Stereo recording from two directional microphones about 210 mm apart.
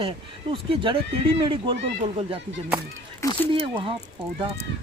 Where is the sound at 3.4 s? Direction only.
25° right (ahead or behind).